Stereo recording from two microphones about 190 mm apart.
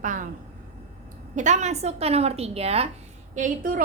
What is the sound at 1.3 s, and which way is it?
A woman's voice, 40° right (ahead or behind).